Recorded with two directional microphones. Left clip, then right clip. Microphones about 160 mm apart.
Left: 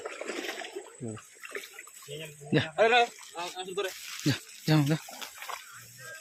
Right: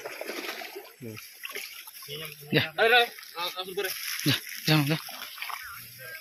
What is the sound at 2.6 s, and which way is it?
A man's voice, 60° left (ahead or behind).